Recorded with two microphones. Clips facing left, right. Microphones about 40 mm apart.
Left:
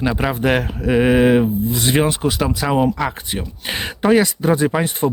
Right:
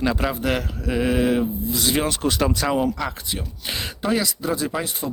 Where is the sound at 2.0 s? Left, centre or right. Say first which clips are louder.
Left 3 dB; centre.